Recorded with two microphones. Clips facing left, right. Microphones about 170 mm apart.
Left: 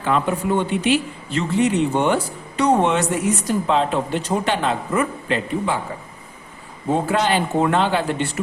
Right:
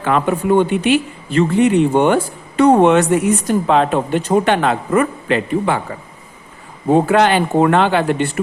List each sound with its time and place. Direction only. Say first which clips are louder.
0.0 s speech: right 4 dB; 60° right (ahead or behind)
7.1 s speech: right 6 dB; 70° right (ahead or behind)